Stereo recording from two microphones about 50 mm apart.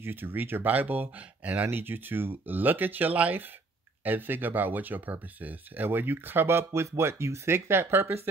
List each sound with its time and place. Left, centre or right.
0.0 s speech: right